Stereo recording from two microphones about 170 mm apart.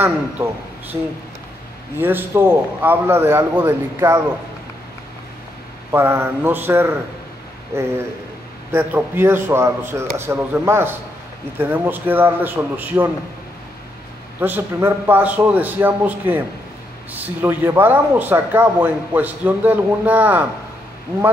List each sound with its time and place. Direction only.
0.4 s speech: 15° right (ahead or behind)
0.9 s speech: 30° right (ahead or behind)
2.0 s speech: 10° right (ahead or behind)
5.9 s speech: 15° right (ahead or behind)
8.7 s speech: 15° right (ahead or behind)
14.4 s speech: 15° right (ahead or behind)